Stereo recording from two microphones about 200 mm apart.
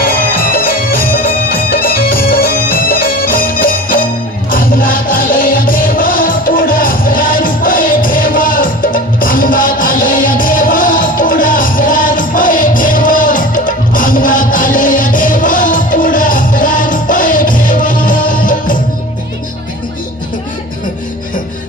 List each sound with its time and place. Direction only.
0.0 s music: 45° left (ahead or behind)